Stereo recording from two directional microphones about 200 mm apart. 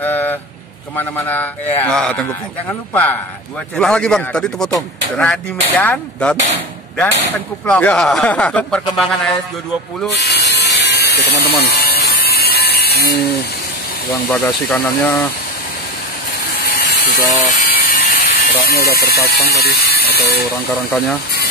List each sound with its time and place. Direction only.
0.0 s a sound: 10° left (ahead or behind)
0.9 s a man's voice: 10° left (ahead or behind)
7.3 s speech: 5° left (ahead or behind)
10.1 s electric shaver: 55° left (ahead or behind)
11.6 s a sound: 50° left (ahead or behind)
14.3 s a man's voice: 10° left (ahead or behind)
17.5 s speech: 45° left (ahead or behind)